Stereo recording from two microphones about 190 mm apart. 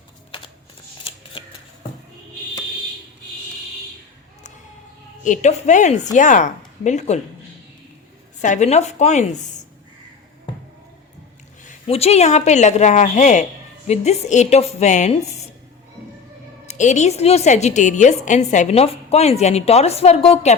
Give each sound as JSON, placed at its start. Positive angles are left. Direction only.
{"t": 1.0, "sound": "scissors", "side_deg": 30}
{"t": 5.2, "sound": "a woman's voice", "side_deg": 40}
{"t": 8.4, "sound": "a woman's voice", "side_deg": 40}
{"t": 11.6, "sound": "a woman's voice", "side_deg": 35}
{"t": 16.6, "sound": "a woman's voice", "side_deg": 40}